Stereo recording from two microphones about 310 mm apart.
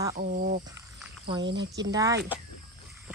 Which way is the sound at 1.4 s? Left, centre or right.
Right.